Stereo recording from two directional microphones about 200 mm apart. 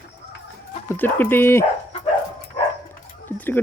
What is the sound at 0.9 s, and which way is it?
Speech, 10° left (ahead or behind).